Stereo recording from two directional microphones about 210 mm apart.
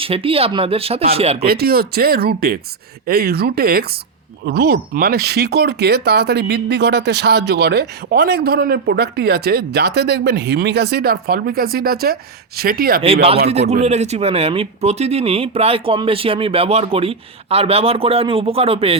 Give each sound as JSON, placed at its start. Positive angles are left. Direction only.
{"t": 0.0, "sound": "speech", "side_deg": -25}
{"t": 1.5, "sound": "speech", "side_deg": -45}
{"t": 13.5, "sound": "speech", "side_deg": -30}